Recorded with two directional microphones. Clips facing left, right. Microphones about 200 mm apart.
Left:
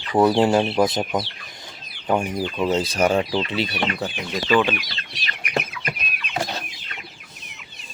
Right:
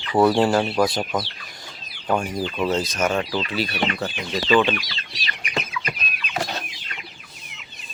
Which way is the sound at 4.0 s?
5° left (ahead or behind).